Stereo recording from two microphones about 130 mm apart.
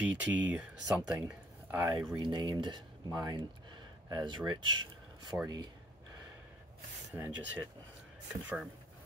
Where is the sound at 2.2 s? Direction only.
35° right (ahead or behind).